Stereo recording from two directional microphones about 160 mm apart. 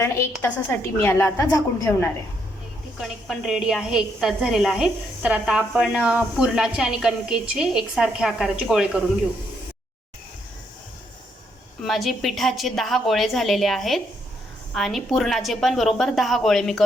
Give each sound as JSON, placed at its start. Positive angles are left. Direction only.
{"t": 0.0, "sound": "a woman's voice", "side_deg": 15}
{"t": 3.0, "sound": "a woman's voice", "side_deg": 0}
{"t": 11.8, "sound": "a woman's voice", "side_deg": 0}